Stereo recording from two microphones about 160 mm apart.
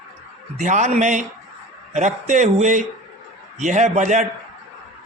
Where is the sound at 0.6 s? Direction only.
50° right (ahead or behind).